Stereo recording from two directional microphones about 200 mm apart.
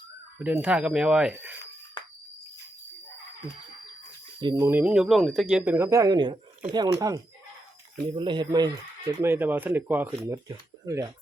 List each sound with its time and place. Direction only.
0.3 s speech: 5° right (ahead or behind)
4.4 s speech: 20° right (ahead or behind)